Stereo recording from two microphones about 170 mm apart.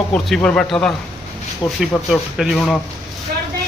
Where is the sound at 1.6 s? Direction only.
25° left (ahead or behind).